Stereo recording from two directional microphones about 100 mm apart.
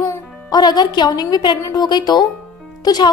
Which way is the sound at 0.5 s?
45° left (ahead or behind).